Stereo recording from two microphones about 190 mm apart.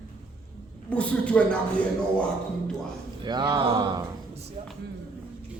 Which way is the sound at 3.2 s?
20° right (ahead or behind).